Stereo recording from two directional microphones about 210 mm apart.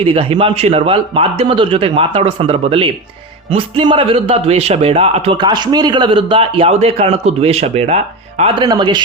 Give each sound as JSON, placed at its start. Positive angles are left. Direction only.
{"t": 0.0, "sound": "a man's voice", "side_deg": -25}